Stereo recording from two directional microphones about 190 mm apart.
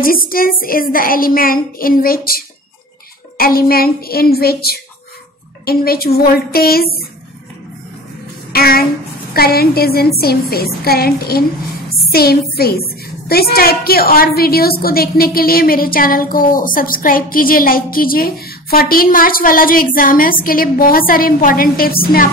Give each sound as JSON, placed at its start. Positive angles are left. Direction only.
{"t": 0.0, "sound": "a woman's voice", "side_deg": 50}
{"t": 8.5, "sound": "a sound", "side_deg": 50}
{"t": 9.3, "sound": "a woman's voice", "side_deg": 55}